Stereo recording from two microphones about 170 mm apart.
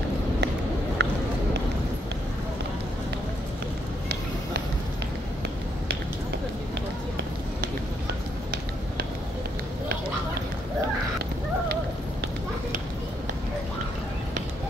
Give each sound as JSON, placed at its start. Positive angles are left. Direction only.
{"t": 1.0, "sound": "run", "side_deg": -75}